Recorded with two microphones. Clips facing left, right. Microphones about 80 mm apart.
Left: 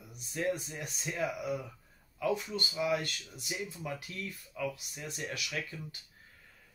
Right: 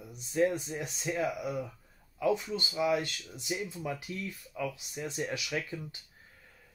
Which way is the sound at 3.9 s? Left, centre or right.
Centre.